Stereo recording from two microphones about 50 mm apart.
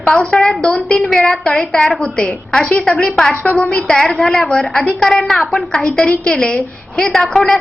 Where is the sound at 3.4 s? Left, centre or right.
Left.